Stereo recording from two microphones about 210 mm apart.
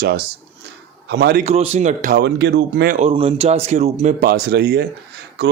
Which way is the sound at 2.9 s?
30° right (ahead or behind).